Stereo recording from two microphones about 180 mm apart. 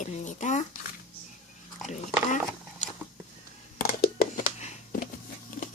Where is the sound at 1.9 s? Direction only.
40° left (ahead or behind).